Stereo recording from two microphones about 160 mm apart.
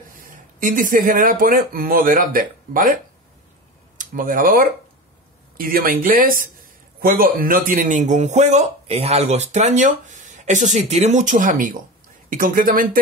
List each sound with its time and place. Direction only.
0.3 s speech: 55° right (ahead or behind)
4.0 s speech: 60° right (ahead or behind)